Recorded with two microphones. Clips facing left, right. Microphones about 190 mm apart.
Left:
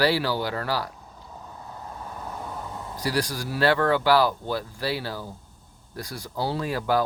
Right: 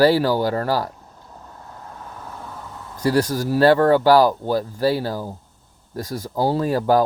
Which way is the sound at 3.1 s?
45° right (ahead or behind).